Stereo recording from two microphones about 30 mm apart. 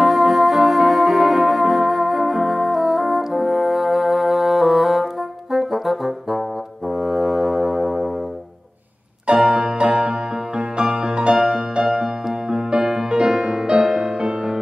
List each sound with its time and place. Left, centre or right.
0.0 s music: centre
5.5 s brass instrument: centre
7.0 s music: centre
9.3 s music: centre
11.3 s music: centre